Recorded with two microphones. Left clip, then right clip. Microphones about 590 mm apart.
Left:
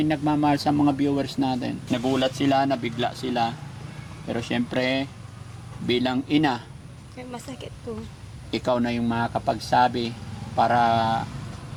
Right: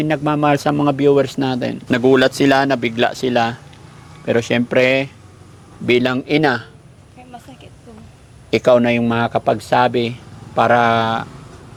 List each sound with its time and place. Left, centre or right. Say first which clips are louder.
0.0 s speech: right 6 dB; right
8.4 s speech: right 12 dB; right